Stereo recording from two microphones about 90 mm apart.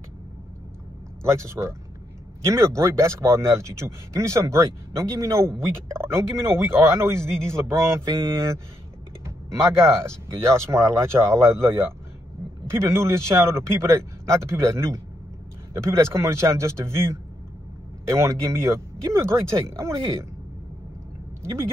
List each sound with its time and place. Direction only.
1.2 s speech: 30° right (ahead or behind)